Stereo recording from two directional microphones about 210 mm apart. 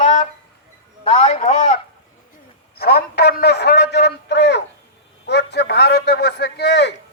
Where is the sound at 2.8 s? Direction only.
50° left (ahead or behind).